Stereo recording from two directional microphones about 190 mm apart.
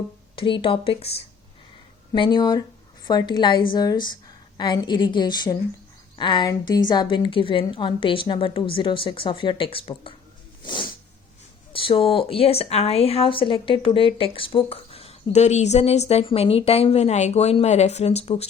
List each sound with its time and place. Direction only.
0.3 s a woman's voice: 25° left (ahead or behind)
2.1 s a woman's voice: 25° left (ahead or behind)
10.6 s a sound: 25° left (ahead or behind)
11.7 s speech: 30° left (ahead or behind)